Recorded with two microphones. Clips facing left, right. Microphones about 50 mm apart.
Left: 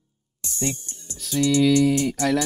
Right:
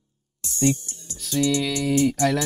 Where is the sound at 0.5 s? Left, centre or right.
Centre.